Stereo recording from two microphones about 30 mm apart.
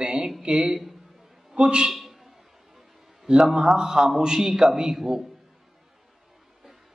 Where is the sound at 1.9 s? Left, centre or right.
Centre.